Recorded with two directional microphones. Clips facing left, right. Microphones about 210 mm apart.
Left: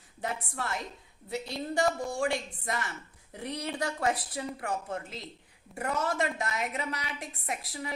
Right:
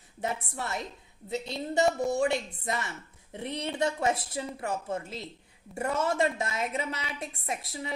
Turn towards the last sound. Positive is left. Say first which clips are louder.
# right 1 dB
turn(degrees=-25)  # may be behind; listen again after turning